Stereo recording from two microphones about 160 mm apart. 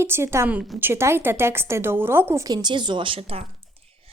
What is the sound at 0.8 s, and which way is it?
A woman's voice, 15° right (ahead or behind).